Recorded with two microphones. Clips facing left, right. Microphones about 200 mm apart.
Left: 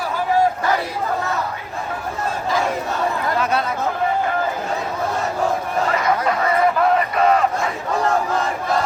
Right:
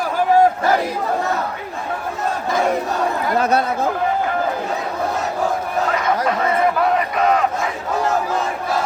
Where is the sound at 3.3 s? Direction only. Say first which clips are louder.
Right 5 dB; 40° right (ahead or behind).